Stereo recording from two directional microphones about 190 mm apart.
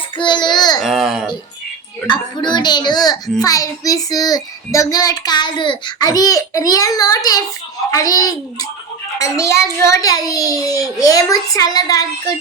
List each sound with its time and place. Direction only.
0.2 s child singing: 25° left (ahead or behind)
0.8 s babbling: centre (ahead or behind)
2.0 s a child's voice: 25° left (ahead or behind)